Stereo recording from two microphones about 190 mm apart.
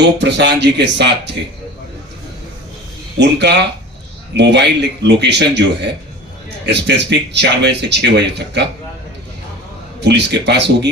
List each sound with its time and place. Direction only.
0.2 s speech: 65° right (ahead or behind)
3.2 s speech: 65° right (ahead or behind)
10.0 s speech: 65° right (ahead or behind)